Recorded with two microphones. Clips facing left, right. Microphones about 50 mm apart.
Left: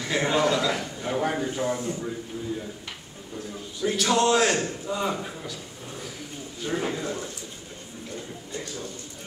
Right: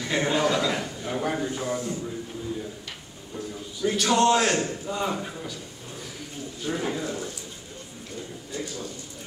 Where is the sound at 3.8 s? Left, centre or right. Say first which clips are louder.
Right 1 dB; centre.